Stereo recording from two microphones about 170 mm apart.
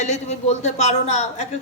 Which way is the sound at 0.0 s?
40° left (ahead or behind).